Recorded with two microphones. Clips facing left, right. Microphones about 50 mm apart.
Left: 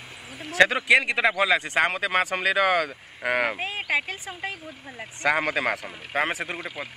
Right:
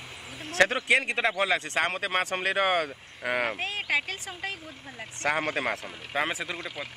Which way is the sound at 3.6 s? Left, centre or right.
Centre.